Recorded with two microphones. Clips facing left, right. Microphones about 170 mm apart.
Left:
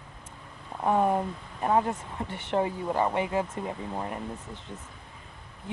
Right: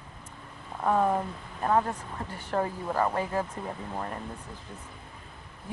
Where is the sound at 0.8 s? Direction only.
15° left (ahead or behind).